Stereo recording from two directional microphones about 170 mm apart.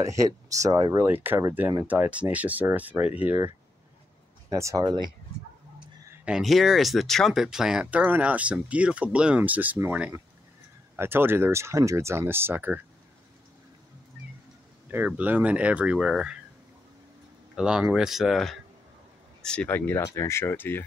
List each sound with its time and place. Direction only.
0.0 s speech: 20° right (ahead or behind)
4.5 s speech: 20° right (ahead or behind)
6.2 s speech: centre (ahead or behind)
14.9 s speech: 10° right (ahead or behind)
17.6 s speech: 5° right (ahead or behind); by 20.8 s 10° left (ahead or behind)